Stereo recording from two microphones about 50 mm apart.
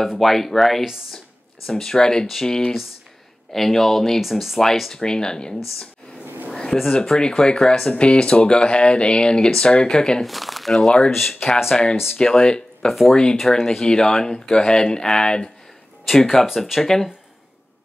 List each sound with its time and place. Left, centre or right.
0.2 s speech: centre
6.2 s a sound: right
6.5 s a sound: centre
6.9 s speech: centre
7.9 s speech: left
10.2 s speech: centre
11.7 s speech: centre
16.4 s speech: centre
16.8 s speech: centre